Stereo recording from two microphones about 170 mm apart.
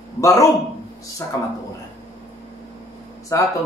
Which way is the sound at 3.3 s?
15° left (ahead or behind).